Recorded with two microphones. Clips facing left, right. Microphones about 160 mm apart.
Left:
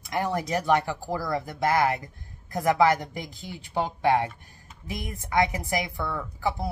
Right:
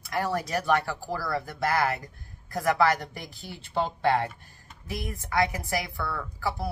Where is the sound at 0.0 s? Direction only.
20° left (ahead or behind).